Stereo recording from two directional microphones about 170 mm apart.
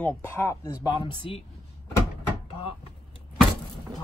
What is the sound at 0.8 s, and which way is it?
Speech, 25° left (ahead or behind).